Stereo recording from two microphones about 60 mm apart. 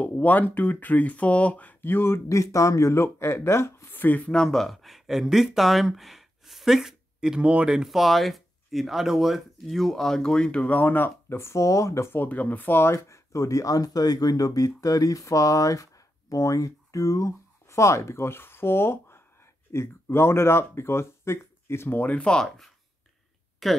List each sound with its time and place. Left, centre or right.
0.0 s speech: left
3.9 s speech: left
4.3 s speech: centre; by 12.1 s left
12.1 s speech: left
21.9 s speech: left
23.6 s speech: centre